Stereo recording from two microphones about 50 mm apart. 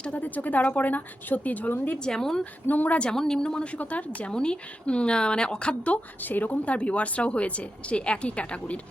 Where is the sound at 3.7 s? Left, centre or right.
Left.